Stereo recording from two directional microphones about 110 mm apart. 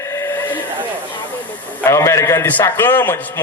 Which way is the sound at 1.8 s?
25° left (ahead or behind).